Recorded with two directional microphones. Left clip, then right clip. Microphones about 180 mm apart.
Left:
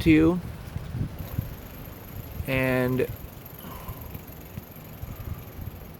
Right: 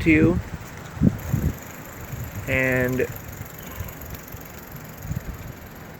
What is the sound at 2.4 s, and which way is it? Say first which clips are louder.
Speech: right 3 dB; 25° left (ahead or behind).